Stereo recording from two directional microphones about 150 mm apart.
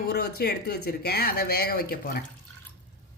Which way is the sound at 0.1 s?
90° left.